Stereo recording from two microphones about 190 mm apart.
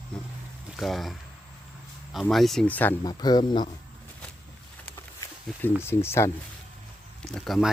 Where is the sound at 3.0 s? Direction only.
20° left (ahead or behind).